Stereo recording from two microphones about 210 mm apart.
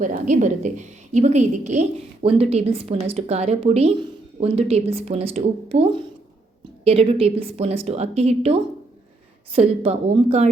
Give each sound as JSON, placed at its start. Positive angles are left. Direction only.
{"t": 0.0, "sound": "a woman's voice", "side_deg": -35}